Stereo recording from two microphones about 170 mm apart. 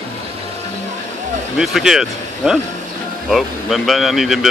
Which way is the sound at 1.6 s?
5° right (ahead or behind).